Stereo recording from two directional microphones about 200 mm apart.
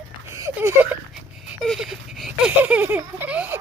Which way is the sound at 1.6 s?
Centre (ahead or behind).